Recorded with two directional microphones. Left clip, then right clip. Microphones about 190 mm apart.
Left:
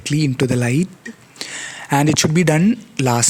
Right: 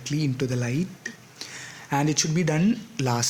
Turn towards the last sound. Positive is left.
turn(degrees=45)  # may be behind; listen again after turning